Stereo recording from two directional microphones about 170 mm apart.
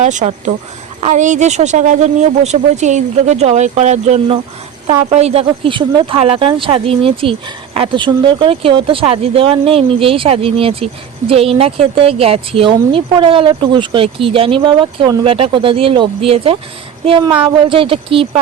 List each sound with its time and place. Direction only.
0.0 s speech: 45° right (ahead or behind)